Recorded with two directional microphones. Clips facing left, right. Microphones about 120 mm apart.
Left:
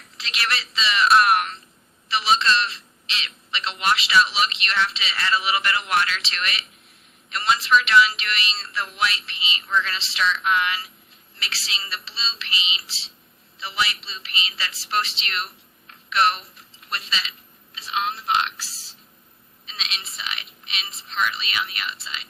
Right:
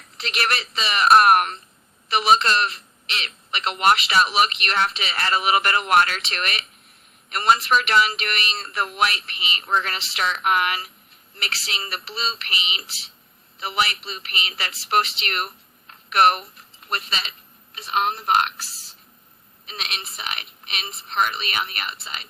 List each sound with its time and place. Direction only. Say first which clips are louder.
0.2 s speech: right 3 dB; 50° right (ahead or behind)